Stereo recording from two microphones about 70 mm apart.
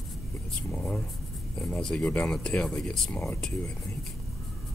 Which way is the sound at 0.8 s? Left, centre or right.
Centre.